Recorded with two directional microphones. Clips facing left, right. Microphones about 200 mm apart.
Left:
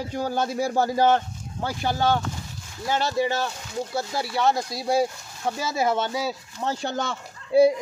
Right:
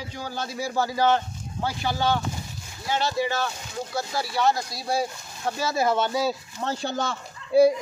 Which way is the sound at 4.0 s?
25° left (ahead or behind).